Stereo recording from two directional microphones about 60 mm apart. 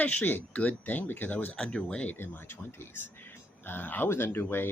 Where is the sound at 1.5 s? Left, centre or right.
Centre.